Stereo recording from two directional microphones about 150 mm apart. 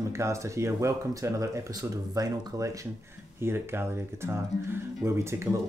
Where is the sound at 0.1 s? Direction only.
20° right (ahead or behind).